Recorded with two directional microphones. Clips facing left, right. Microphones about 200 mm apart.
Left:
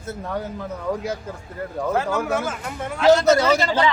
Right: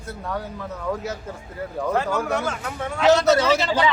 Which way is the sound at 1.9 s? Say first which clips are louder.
Left 1 dB; 5° left (ahead or behind).